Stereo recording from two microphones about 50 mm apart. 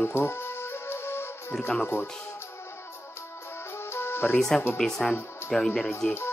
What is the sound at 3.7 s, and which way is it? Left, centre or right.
Music, left.